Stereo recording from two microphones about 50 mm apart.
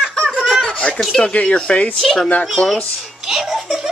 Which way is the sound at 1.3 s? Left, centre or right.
Left.